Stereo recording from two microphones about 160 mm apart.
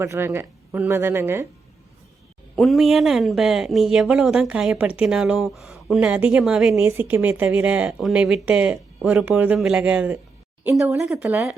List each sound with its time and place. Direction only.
0.0 s speech: 15° right (ahead or behind)
2.6 s speech: centre (ahead or behind)